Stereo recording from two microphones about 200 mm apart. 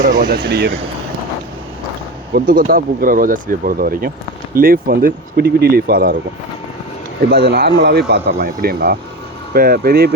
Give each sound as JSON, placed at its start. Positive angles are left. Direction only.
{"t": 0.0, "sound": "speech", "side_deg": -50}
{"t": 2.3, "sound": "speech", "side_deg": -45}
{"t": 7.3, "sound": "speech", "side_deg": -50}